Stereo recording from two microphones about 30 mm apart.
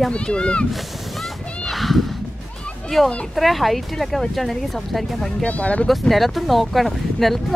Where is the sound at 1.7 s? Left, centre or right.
Centre.